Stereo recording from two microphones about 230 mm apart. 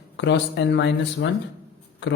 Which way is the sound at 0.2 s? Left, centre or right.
Left.